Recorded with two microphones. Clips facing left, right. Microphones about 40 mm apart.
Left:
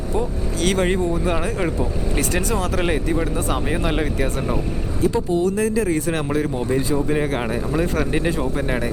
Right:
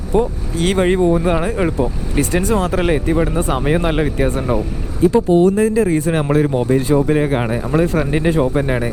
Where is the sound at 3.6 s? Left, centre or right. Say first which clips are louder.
Right 6 dB; right.